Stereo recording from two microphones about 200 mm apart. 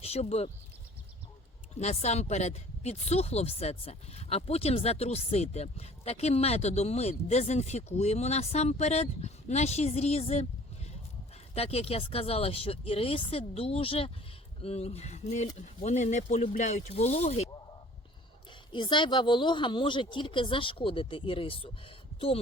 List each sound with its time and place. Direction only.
0.0 s speech: 30° left (ahead or behind)
1.8 s speech: 35° left (ahead or behind)
11.5 s speech: 30° left (ahead or behind)
18.7 s speech: 25° left (ahead or behind)